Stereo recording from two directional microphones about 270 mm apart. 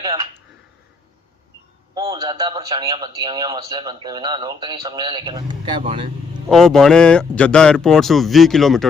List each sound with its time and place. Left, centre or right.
2.0 s a man's voice: centre
6.5 s speech: centre